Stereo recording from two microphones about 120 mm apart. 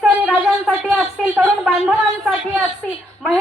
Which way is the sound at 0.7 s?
10° right (ahead or behind).